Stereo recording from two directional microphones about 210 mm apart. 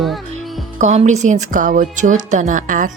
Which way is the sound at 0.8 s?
35° right (ahead or behind).